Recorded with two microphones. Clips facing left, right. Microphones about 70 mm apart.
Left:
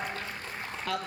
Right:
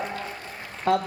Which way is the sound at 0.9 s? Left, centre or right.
Right.